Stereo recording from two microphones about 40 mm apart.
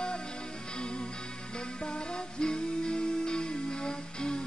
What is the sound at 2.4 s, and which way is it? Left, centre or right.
Music, left.